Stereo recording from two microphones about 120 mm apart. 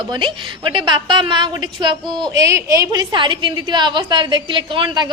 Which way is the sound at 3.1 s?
40° right (ahead or behind).